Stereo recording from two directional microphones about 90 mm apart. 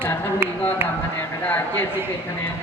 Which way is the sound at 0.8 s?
25° right (ahead or behind).